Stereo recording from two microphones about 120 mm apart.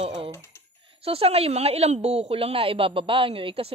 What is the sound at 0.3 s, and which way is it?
Typing, 25° left (ahead or behind).